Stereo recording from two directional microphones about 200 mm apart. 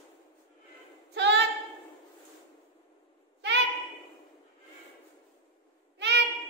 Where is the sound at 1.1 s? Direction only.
60° right (ahead or behind).